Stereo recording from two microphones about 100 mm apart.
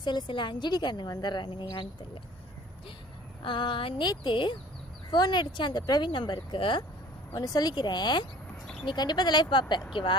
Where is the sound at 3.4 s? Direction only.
55° left (ahead or behind).